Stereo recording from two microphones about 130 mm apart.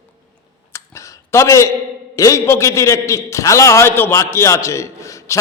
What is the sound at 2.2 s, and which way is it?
A man's voice, 25° left (ahead or behind).